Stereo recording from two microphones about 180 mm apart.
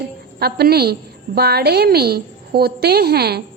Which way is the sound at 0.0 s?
60° right (ahead or behind).